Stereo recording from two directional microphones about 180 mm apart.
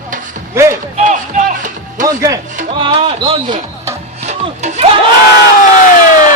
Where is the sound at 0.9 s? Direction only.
45° right (ahead or behind).